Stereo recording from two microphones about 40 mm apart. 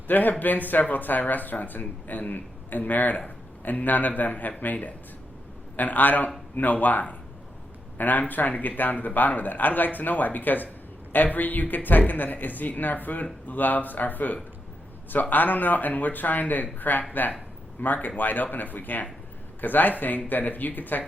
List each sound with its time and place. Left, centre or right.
0.1 s speech: left